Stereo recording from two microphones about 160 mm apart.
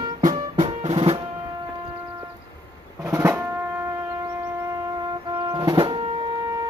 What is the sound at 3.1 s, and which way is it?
Music, 15° right (ahead or behind).